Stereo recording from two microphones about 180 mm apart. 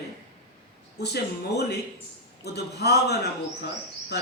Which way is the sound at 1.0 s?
65° left (ahead or behind).